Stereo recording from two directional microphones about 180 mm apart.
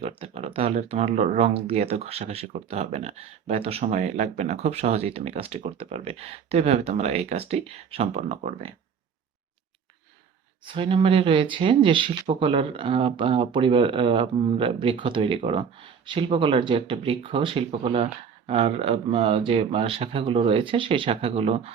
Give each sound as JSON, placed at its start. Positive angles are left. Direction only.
{"t": 0.0, "sound": "speech", "side_deg": -35}
{"t": 10.7, "sound": "speech", "side_deg": -30}